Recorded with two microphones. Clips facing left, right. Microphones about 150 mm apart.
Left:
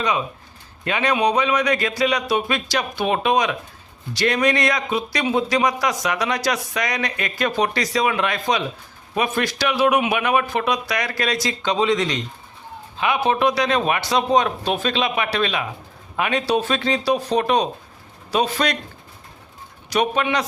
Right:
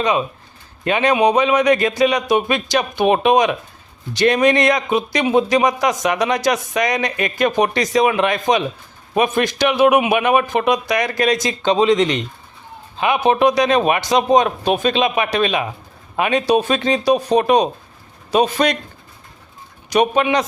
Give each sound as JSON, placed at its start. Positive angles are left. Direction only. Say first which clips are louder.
{"t": 0.9, "sound": "a man's voice", "louder": "right 5 dB", "side_deg": -20}
{"t": 19.9, "sound": "a man's voice", "louder": "right 5 dB", "side_deg": -20}